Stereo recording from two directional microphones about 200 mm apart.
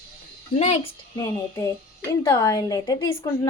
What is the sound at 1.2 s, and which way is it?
A woman's voice, 15° left (ahead or behind).